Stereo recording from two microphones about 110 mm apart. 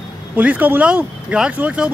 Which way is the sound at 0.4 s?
15° right (ahead or behind).